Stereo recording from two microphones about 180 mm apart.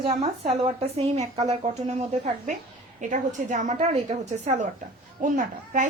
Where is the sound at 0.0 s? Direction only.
30° right (ahead or behind).